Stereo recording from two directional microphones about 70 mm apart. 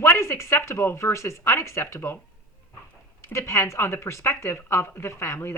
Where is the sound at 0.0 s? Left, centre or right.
Left.